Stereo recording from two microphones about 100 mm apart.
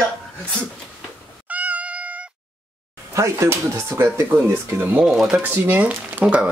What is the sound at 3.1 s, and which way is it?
Speech, 30° right (ahead or behind).